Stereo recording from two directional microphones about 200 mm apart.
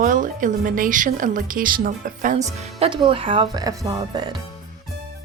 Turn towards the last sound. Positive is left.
turn(degrees=-20)  # may be behind; listen again after turning